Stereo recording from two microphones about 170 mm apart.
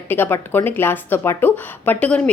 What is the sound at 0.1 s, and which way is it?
Speech, 15° left (ahead or behind).